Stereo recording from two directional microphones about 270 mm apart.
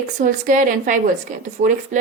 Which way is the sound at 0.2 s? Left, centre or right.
Right.